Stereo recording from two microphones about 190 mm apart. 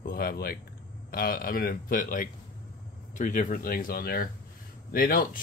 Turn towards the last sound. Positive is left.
turn(degrees=50)  # may be behind; listen again after turning